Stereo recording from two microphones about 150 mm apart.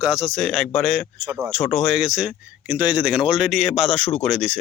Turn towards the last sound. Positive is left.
turn(degrees=0)  # may be behind; listen again after turning